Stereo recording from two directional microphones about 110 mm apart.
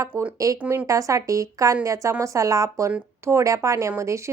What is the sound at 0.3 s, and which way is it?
Speech, 30° right (ahead or behind).